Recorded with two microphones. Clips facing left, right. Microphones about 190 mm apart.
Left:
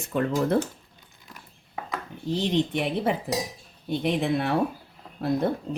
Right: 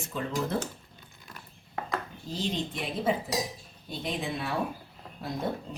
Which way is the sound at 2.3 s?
70° left (ahead or behind).